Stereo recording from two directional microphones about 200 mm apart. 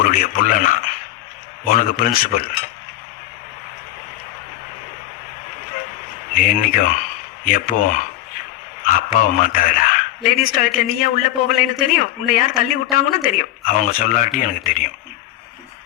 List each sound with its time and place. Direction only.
0.0 s a man's voice: 45° left (ahead or behind)
6.3 s a man's voice: 45° left (ahead or behind)